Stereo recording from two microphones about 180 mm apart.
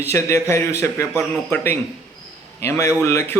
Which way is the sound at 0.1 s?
15° left (ahead or behind).